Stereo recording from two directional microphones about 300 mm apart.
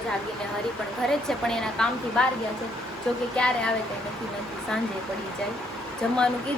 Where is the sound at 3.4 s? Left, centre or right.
Centre.